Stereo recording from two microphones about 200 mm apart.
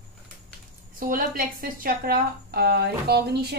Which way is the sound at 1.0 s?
45° right (ahead or behind).